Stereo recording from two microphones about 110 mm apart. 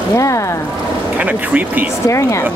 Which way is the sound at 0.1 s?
30° left (ahead or behind).